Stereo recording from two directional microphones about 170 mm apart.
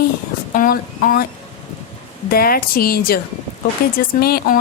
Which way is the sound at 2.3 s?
60° left (ahead or behind).